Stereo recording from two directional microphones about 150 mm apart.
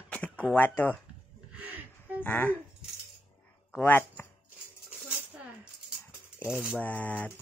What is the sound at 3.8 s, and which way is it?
Speech, 15° left (ahead or behind).